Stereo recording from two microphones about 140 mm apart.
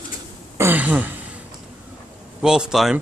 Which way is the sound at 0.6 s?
10° right (ahead or behind).